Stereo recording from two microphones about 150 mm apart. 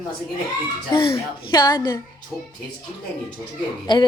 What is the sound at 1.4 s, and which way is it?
Child singing, 30° left (ahead or behind).